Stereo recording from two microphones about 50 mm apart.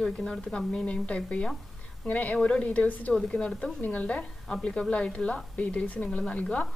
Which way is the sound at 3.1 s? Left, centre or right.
Centre.